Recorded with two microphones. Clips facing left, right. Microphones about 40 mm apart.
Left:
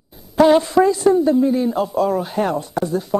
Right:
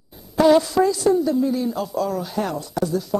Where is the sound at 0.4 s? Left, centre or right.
Left.